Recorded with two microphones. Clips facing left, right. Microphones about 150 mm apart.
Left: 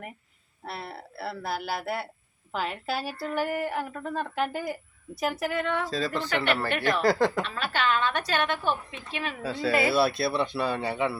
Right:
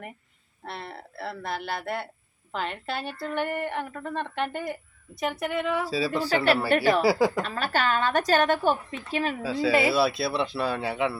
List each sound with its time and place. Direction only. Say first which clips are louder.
0.6 s speech: even; 5° left (ahead or behind)
6.2 s speech: right 6 dB; 35° right (ahead or behind)
7.0 s speech: right 1 dB; 10° right (ahead or behind)
7.4 s a woman's voice: right 2 dB; 45° right (ahead or behind)
9.4 s speech: right 1 dB; centre (ahead or behind)